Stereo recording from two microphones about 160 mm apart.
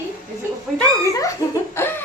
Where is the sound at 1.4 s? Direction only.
20° left (ahead or behind).